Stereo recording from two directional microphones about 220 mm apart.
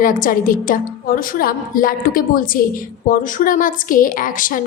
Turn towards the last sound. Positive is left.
turn(degrees=35)  # may be behind; listen again after turning